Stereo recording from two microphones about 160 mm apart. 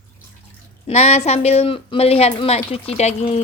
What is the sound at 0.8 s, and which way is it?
Speech, 40° left (ahead or behind).